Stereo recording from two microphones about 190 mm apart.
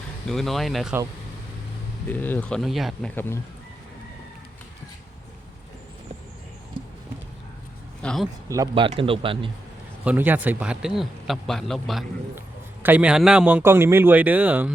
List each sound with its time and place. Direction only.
0.3 s a man's voice: centre (ahead or behind)
2.0 s a man's voice: 10° left (ahead or behind)
3.2 s speech: 10° left (ahead or behind)
8.0 s speech: centre (ahead or behind)
8.4 s a man's voice: 20° right (ahead or behind)
10.0 s a man's voice: 10° right (ahead or behind)